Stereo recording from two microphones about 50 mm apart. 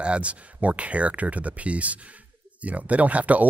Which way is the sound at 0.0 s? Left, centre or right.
Right.